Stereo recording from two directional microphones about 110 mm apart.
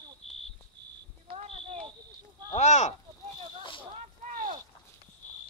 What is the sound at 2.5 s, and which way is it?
Speech, 90° left.